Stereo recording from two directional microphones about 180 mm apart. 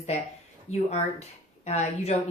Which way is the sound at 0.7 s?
35° left (ahead or behind).